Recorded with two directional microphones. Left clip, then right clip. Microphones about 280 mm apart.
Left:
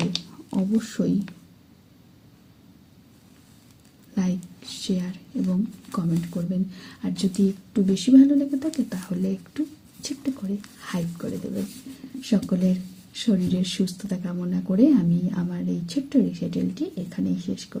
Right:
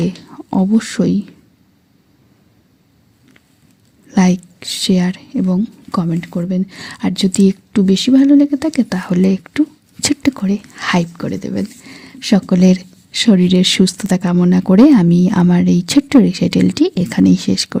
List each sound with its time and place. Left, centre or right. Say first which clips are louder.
0.8 s speech: right 9 dB; right
4.1 s a woman's voice: right 14 dB; right